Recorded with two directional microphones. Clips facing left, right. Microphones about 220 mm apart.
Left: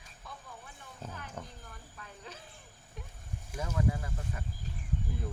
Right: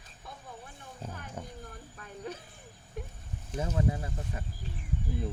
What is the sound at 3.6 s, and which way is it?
Speech, 25° right (ahead or behind).